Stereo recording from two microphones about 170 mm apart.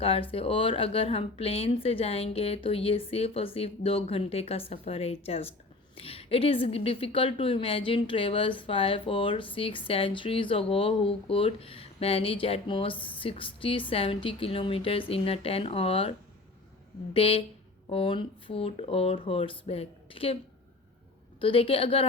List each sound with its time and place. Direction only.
0.0 s a woman's voice: 35° left (ahead or behind)
17.2 s a woman's voice: 35° left (ahead or behind)
21.4 s a woman's voice: 35° left (ahead or behind)